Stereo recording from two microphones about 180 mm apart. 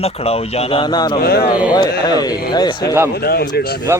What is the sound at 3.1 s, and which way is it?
Speech, 60° left (ahead or behind).